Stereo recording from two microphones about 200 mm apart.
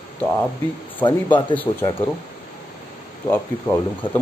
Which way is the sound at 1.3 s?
10° left (ahead or behind).